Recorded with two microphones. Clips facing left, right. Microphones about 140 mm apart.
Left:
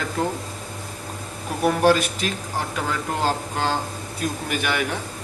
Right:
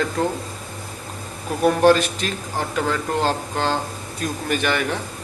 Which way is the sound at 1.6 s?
10° left (ahead or behind).